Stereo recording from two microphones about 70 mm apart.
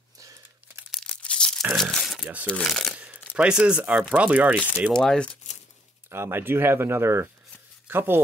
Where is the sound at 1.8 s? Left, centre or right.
Centre.